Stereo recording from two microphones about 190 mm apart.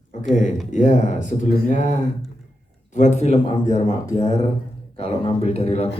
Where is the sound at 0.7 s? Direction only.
40° left (ahead or behind).